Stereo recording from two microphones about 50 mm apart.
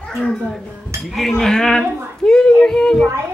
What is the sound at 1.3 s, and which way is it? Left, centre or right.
A woman's voice, centre.